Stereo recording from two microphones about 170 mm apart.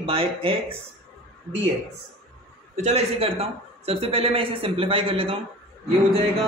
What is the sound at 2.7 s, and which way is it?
A man's voice, 40° right (ahead or behind).